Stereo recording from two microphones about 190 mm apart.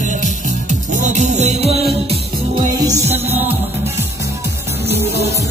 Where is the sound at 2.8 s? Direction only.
15° right (ahead or behind).